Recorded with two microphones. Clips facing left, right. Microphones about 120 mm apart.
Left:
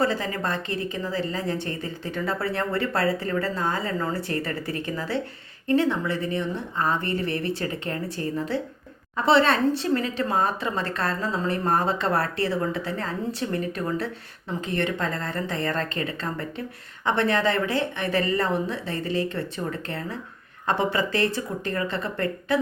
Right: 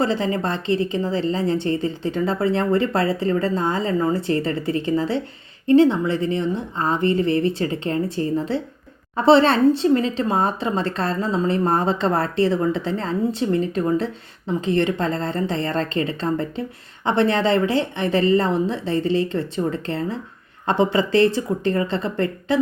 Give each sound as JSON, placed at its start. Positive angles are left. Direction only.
{"t": 0.0, "sound": "speech", "side_deg": -25}